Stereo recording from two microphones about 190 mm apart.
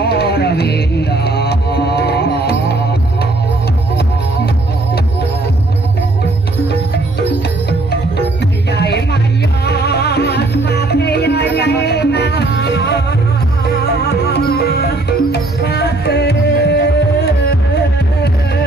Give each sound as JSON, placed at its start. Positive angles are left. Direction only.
{"t": 0.0, "sound": "music", "side_deg": 60}
{"t": 8.7, "sound": "music", "side_deg": 60}
{"t": 14.0, "sound": "music", "side_deg": 60}